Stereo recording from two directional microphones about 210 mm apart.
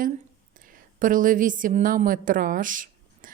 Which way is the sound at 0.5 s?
40° right (ahead or behind).